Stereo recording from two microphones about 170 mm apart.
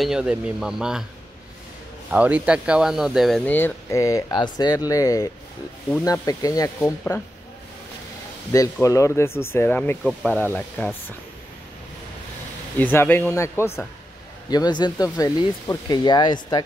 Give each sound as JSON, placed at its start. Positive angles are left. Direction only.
{"t": 0.0, "sound": "speech", "side_deg": -5}
{"t": 2.0, "sound": "speech", "side_deg": -10}
{"t": 8.5, "sound": "speech", "side_deg": 20}
{"t": 12.7, "sound": "speech", "side_deg": 10}